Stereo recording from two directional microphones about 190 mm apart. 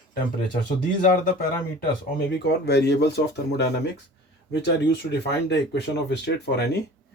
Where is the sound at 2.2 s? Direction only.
60° left (ahead or behind).